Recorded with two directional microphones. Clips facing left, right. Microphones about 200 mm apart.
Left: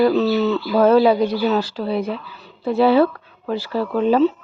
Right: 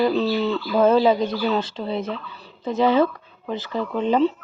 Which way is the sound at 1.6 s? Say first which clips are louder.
Left 4 dB; 25° right (ahead or behind).